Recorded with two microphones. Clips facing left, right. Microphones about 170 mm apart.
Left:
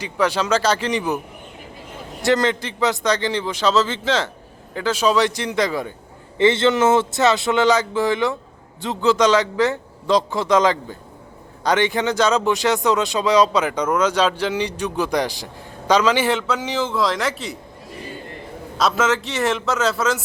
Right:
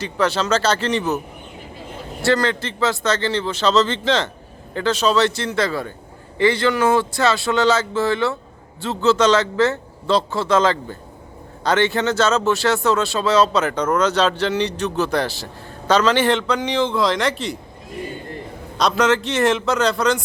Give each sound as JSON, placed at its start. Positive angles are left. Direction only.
{"t": 0.0, "sound": "speech", "side_deg": 10}
{"t": 2.2, "sound": "a man's voice", "side_deg": 20}
{"t": 18.8, "sound": "a man's voice", "side_deg": 0}